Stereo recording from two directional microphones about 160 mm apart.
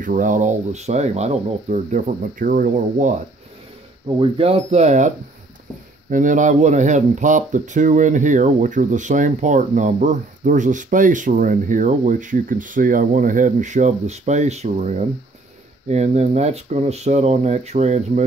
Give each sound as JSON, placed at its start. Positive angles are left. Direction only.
{"t": 0.0, "sound": "speech", "side_deg": -55}
{"t": 4.2, "sound": "speech", "side_deg": -35}